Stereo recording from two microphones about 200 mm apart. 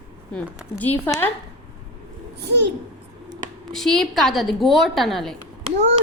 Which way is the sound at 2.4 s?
60° right (ahead or behind).